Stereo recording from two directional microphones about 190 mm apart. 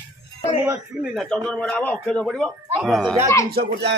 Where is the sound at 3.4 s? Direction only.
55° right (ahead or behind).